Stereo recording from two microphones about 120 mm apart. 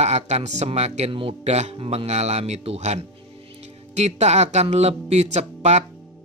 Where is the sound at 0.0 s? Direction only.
65° right (ahead or behind).